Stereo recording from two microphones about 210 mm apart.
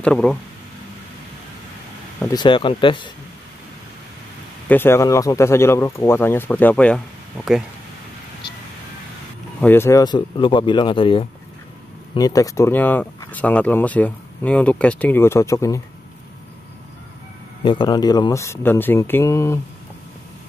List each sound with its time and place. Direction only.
0.0 s speech: 5° left (ahead or behind)
2.2 s speech: 20° left (ahead or behind)
4.6 s speech: 10° left (ahead or behind)
9.6 s speech: 10° left (ahead or behind)
17.6 s speech: 20° left (ahead or behind)